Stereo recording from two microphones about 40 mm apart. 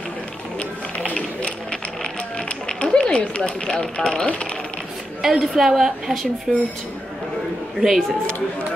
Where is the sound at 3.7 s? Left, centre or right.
Centre.